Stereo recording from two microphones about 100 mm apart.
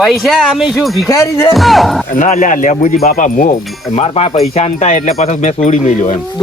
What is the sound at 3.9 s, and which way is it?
Speech, 90° left.